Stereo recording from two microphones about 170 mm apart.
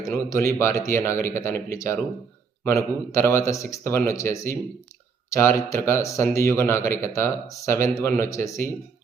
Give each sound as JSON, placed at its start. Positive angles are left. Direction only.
{"t": 0.0, "sound": "a man's voice", "side_deg": 20}